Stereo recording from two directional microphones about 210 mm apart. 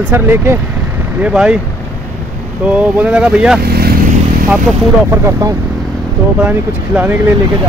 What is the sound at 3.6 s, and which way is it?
Speech, 50° right (ahead or behind).